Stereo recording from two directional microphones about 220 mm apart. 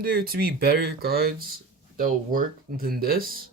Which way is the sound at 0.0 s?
40° right (ahead or behind).